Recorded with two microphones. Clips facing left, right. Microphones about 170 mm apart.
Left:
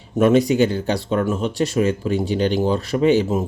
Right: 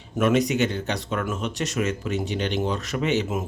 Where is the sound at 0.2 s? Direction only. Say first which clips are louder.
Left 6 dB; 35° left (ahead or behind).